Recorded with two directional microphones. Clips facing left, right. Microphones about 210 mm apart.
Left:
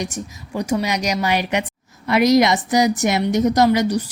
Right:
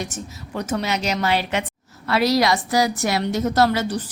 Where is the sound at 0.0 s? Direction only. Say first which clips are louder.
Left 3 dB; 10° left (ahead or behind).